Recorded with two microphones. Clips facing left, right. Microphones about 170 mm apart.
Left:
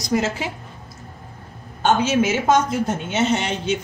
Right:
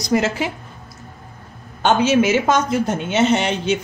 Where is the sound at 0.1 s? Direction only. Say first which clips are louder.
Right 3 dB; 75° right (ahead or behind).